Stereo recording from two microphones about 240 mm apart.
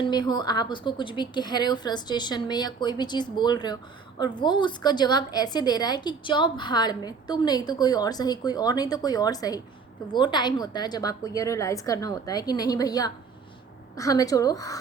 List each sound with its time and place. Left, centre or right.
0.0 s a woman's voice: centre